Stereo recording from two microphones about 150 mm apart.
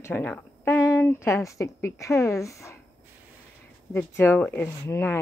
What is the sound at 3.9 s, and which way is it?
Speech, 15° left (ahead or behind).